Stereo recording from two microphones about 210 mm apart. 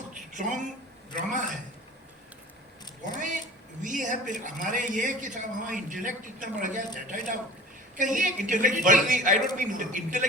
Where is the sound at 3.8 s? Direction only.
35° right (ahead or behind).